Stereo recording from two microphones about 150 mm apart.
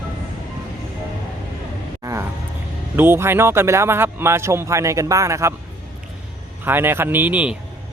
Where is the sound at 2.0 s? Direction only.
20° right (ahead or behind).